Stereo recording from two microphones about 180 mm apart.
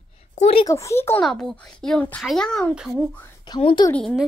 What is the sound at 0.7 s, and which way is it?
Speech, 15° left (ahead or behind).